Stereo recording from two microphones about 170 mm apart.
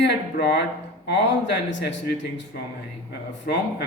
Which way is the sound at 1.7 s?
90° left.